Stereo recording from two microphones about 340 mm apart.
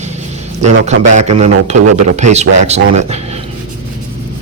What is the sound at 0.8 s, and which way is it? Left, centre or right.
A man's voice, centre.